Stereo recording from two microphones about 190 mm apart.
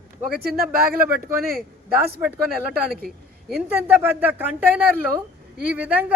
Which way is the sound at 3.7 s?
10° right (ahead or behind).